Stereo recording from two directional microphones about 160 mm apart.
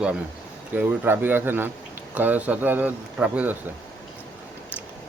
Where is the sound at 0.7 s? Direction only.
10° right (ahead or behind).